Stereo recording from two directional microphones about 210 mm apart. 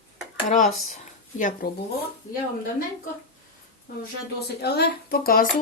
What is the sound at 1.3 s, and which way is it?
Speech, 40° left (ahead or behind).